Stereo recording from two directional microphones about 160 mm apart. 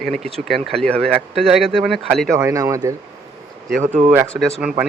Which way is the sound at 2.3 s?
20° right (ahead or behind).